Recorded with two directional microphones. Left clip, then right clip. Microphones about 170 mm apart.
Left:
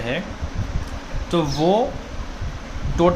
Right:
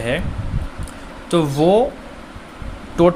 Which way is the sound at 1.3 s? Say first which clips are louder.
Right 4 dB; 35° right (ahead or behind).